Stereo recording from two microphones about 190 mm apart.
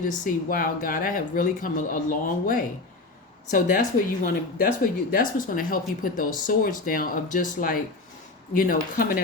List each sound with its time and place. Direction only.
0.0 s speech: 45° left (ahead or behind)